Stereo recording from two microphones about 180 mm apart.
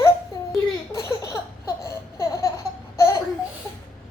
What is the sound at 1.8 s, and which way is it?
Laughter, 15° left (ahead or behind).